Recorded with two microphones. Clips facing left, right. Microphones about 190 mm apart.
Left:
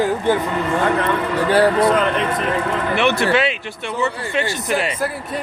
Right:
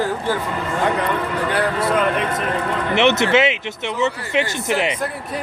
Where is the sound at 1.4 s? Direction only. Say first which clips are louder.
Left 8 dB; 30° left (ahead or behind).